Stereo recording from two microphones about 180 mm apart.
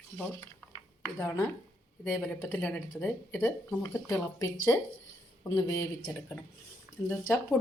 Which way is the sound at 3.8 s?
20° left (ahead or behind).